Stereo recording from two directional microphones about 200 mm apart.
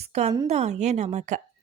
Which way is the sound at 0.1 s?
35° right (ahead or behind).